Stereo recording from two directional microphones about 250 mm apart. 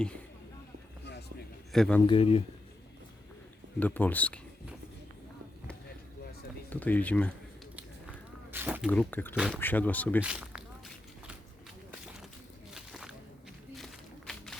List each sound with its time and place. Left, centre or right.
1.7 s speech: centre
2.0 s speech: left
3.8 s speech: centre
6.7 s speech: centre
8.5 s speech: centre
8.9 s speech: centre
10.2 s speech: centre
12.7 s a sound: centre